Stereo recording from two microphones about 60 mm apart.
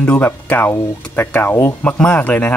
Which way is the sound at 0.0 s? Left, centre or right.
Left.